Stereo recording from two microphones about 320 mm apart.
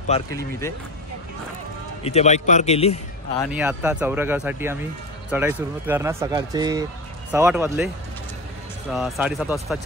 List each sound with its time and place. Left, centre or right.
0.1 s speech: centre
2.0 s a man's voice: left
3.5 s speech: centre
8.9 s speech: centre